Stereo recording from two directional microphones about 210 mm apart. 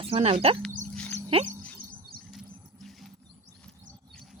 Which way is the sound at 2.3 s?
Centre (ahead or behind).